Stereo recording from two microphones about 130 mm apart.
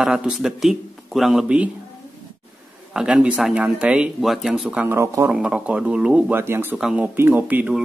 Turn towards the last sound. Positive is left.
turn(degrees=-10)  # may be behind; listen again after turning